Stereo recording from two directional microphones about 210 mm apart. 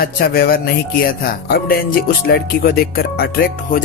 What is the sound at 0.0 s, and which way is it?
Speech, 45° left (ahead or behind).